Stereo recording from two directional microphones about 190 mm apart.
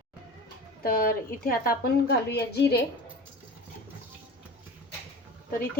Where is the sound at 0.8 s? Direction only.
50° left (ahead or behind).